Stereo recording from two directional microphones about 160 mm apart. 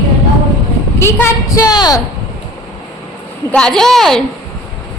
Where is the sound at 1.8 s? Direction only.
25° left (ahead or behind).